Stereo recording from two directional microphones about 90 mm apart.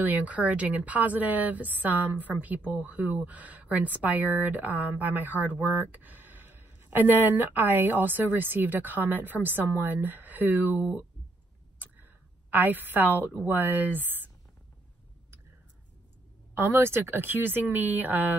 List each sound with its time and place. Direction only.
0.0 s a woman's voice: 20° right (ahead or behind)
16.5 s speech: 30° right (ahead or behind)